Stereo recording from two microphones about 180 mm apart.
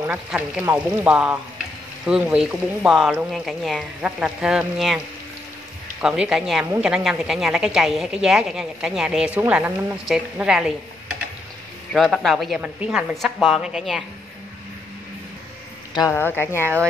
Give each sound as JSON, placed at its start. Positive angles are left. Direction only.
{"t": 0.0, "sound": "speech", "side_deg": -5}
{"t": 15.9, "sound": "a man's voice", "side_deg": 15}